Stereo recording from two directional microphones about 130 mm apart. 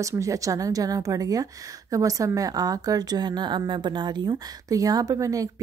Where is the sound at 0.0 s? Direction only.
25° right (ahead or behind).